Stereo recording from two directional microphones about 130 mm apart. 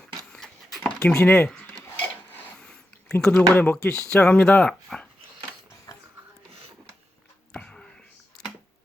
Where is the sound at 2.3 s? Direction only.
5° left (ahead or behind).